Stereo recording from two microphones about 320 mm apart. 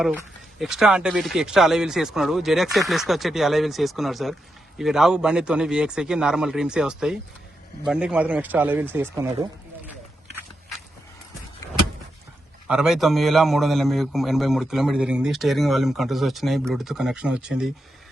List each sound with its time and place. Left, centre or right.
0.0 s a man's voice: centre
12.6 s a man's voice: centre